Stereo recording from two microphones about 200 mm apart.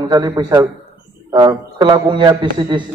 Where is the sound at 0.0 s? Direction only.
20° right (ahead or behind).